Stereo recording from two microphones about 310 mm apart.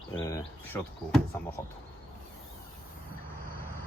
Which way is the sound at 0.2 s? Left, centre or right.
Centre.